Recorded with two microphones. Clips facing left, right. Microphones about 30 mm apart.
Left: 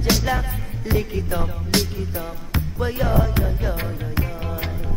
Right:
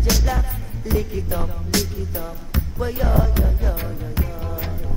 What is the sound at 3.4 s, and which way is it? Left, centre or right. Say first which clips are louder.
Music: left 1 dB; left.